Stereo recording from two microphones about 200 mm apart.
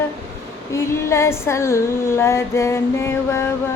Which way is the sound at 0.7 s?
15° left (ahead or behind).